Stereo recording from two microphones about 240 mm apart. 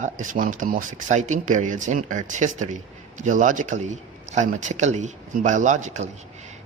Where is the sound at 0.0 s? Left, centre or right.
Right.